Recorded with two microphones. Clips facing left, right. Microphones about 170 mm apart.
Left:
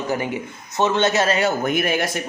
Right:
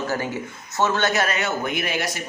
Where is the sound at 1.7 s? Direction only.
50° left (ahead or behind).